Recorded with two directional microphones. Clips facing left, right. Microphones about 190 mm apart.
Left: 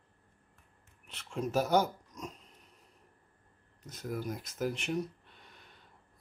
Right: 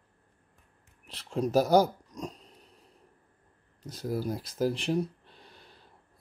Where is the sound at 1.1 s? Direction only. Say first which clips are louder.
Right 6 dB; 35° right (ahead or behind).